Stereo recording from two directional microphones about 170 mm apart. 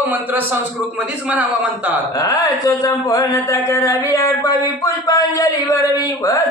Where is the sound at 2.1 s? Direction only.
20° left (ahead or behind).